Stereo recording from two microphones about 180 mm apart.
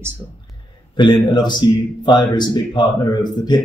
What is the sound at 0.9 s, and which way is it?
A man's voice, 25° left (ahead or behind).